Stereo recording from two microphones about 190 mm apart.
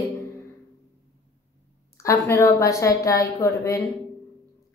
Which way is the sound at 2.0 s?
15° left (ahead or behind).